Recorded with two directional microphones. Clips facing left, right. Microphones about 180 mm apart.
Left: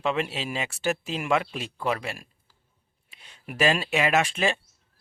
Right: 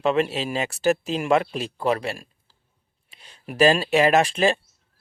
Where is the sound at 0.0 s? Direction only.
40° right (ahead or behind).